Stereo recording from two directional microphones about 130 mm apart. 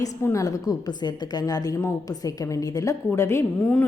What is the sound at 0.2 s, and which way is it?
A woman's voice, 20° left (ahead or behind).